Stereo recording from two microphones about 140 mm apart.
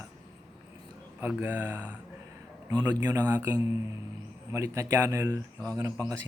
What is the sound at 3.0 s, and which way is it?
Speech, 25° right (ahead or behind).